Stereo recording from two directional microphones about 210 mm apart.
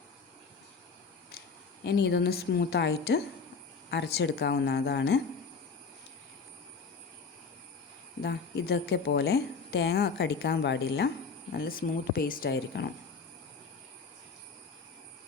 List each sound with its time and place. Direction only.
1.8 s a woman's voice: 50° left (ahead or behind)
8.2 s a woman's voice: 50° left (ahead or behind)
11.5 s a woman's voice: 45° left (ahead or behind)